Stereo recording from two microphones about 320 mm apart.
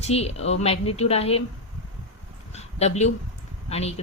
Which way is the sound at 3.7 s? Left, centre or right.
Centre.